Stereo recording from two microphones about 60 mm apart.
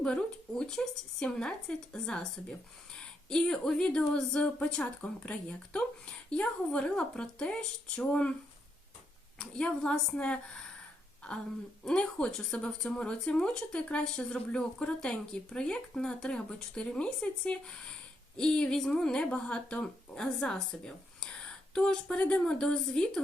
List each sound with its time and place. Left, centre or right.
0.0 s speech: centre
9.4 s speech: centre
11.9 s speech: centre